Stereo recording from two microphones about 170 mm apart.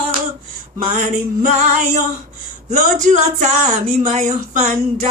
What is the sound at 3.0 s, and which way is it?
Female singing, 45° right (ahead or behind).